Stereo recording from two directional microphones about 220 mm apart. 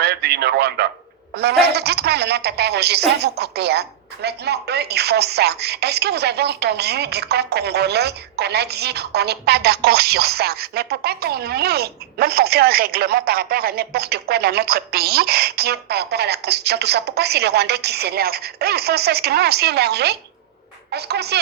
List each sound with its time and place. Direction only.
0.0 s a woman's voice: 50° right (ahead or behind)